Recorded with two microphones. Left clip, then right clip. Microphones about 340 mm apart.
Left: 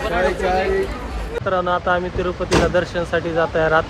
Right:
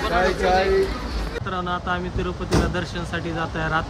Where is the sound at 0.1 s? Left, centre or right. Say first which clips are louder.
Even; centre.